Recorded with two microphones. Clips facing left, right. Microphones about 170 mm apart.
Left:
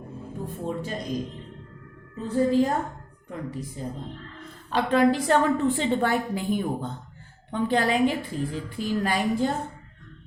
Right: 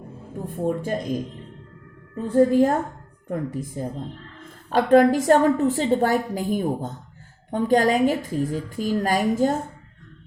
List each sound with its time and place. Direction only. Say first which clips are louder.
0.5 s a woman's voice: right 8 dB; 50° right (ahead or behind)
2.2 s a woman's voice: right 5 dB; 50° right (ahead or behind)